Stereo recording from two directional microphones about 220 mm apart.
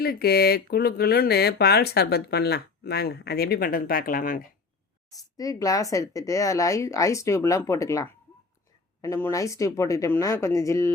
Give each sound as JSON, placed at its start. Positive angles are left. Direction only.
{"t": 0.0, "sound": "speech", "side_deg": 45}
{"t": 5.1, "sound": "speech", "side_deg": 15}